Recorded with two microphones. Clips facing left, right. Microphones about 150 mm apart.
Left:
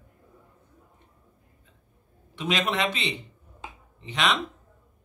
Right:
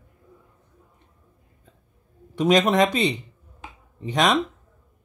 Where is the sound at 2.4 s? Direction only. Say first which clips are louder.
Right 9 dB; 45° right (ahead or behind).